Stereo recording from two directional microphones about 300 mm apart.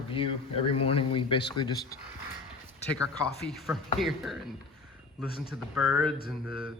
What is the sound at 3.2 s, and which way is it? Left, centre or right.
A man's voice, centre.